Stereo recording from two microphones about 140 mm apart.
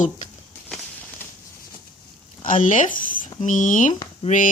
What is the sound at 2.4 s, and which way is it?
Speech, 70° left (ahead or behind).